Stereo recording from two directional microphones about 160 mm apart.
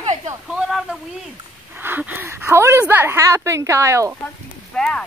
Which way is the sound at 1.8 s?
10° right (ahead or behind).